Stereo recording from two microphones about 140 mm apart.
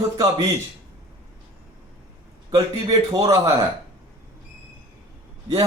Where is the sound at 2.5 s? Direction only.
30° right (ahead or behind).